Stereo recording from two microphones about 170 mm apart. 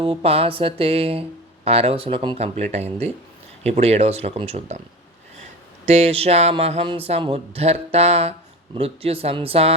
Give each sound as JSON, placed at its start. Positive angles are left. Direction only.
{"t": 0.0, "sound": "speech", "side_deg": -35}
{"t": 5.9, "sound": "speech", "side_deg": -40}